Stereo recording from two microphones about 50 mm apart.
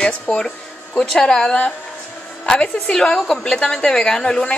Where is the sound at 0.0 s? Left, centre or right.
Left.